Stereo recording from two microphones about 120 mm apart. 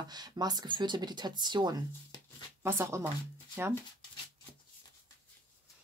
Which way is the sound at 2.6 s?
25° right (ahead or behind).